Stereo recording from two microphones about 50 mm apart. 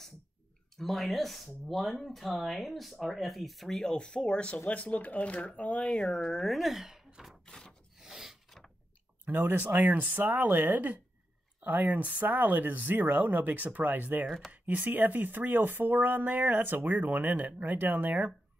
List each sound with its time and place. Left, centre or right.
0.7 s speech: centre
3.9 s speech: centre
5.9 s speech: centre
7.4 s wood: centre
8.0 s wood: centre
8.5 s a sound: centre
9.2 s speech: right
14.2 s speech: centre
14.5 s speech: right